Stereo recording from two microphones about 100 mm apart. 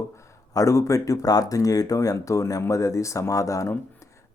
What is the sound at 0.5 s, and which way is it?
Speech, 35° left (ahead or behind).